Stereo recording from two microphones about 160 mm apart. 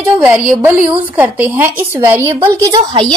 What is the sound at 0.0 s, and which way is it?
A woman's voice, 15° right (ahead or behind).